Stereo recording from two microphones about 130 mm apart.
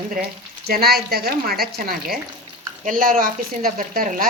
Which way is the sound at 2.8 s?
90° right.